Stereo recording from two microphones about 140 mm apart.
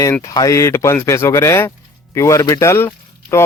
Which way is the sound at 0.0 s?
20° left (ahead or behind).